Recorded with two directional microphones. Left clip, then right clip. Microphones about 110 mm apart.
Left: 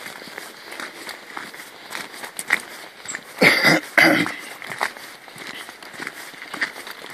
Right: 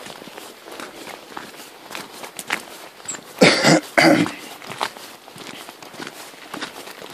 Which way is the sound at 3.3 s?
70° right (ahead or behind).